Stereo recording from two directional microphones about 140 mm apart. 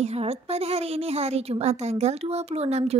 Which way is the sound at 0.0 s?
50° right (ahead or behind).